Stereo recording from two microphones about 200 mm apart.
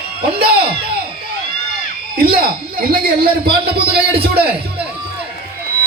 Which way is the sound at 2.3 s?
50° right (ahead or behind).